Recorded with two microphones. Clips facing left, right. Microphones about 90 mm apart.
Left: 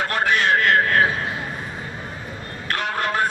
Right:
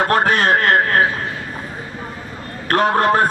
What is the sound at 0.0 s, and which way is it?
A man's voice, 40° right (ahead or behind).